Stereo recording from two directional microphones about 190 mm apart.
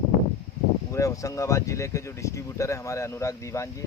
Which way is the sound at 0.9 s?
15° left (ahead or behind).